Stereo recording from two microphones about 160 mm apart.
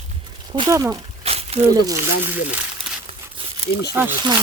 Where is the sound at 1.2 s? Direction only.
40° right (ahead or behind).